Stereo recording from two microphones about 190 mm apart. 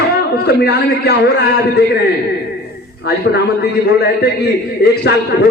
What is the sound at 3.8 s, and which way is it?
Speech, 60° left (ahead or behind).